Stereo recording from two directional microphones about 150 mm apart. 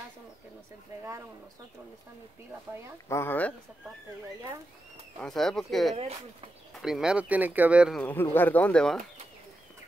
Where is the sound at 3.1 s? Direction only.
15° left (ahead or behind).